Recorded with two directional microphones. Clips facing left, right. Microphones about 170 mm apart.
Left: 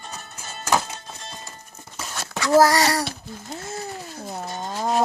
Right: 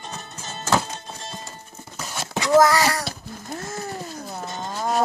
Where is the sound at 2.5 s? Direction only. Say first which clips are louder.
Even; 35° left (ahead or behind).